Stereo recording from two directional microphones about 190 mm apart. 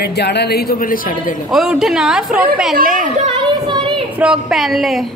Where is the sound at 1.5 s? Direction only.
Centre (ahead or behind).